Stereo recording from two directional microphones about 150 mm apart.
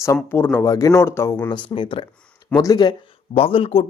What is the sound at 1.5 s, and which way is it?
Speech, 35° left (ahead or behind).